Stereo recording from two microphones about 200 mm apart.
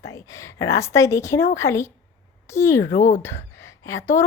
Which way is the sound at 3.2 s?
15° left (ahead or behind).